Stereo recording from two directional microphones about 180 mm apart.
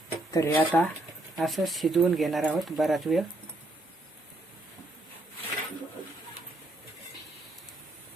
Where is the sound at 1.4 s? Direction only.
Centre (ahead or behind).